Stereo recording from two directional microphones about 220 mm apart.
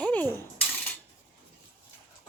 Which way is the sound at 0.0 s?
5° left (ahead or behind).